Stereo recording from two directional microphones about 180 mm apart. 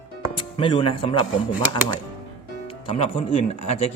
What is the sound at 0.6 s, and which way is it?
Speech, 30° left (ahead or behind).